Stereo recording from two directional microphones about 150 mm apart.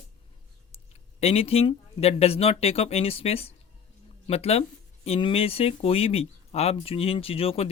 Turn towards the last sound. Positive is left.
turn(degrees=40)  # may be behind; listen again after turning